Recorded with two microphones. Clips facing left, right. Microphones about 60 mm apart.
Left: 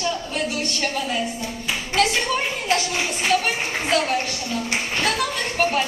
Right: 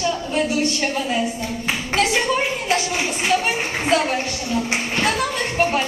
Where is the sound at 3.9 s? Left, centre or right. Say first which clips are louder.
Right 2 dB; centre.